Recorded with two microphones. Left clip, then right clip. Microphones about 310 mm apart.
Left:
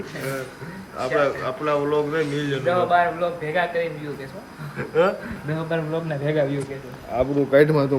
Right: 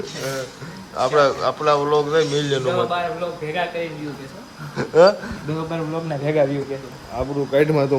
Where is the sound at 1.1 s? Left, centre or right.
Centre.